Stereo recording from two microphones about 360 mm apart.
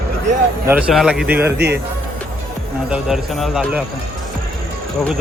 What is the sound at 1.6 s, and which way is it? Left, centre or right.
Speech, right.